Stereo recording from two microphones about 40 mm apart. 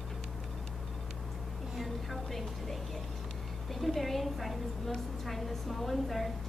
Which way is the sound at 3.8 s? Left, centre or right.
Centre.